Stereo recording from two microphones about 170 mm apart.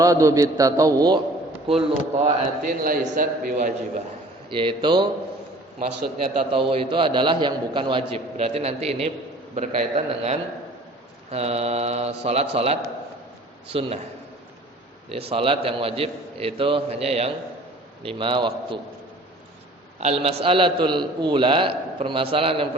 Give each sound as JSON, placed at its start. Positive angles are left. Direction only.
{"t": 0.0, "sound": "a man's voice", "side_deg": -20}
{"t": 1.6, "sound": "a man's voice", "side_deg": -35}
{"t": 2.6, "sound": "a man's voice", "side_deg": -55}
{"t": 4.4, "sound": "a man's voice", "side_deg": -30}
{"t": 6.3, "sound": "a man's voice", "side_deg": -30}
{"t": 15.1, "sound": "a man's voice", "side_deg": -35}
{"t": 20.0, "sound": "a man's voice", "side_deg": -40}